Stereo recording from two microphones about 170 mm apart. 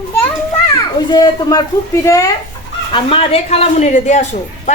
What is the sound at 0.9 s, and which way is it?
A child's voice, 25° left (ahead or behind).